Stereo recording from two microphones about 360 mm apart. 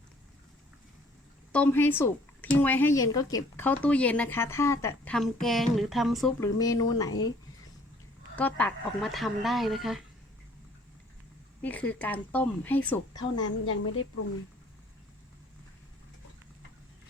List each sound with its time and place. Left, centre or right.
1.5 s a woman's voice: centre
8.4 s a woman's voice: centre
11.6 s a woman's voice: centre
13.4 s a woman's voice: left